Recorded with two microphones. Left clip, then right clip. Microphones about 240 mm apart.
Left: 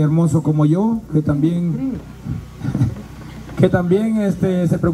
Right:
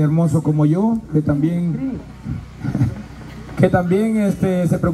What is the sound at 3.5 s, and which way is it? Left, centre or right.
A man's voice, centre.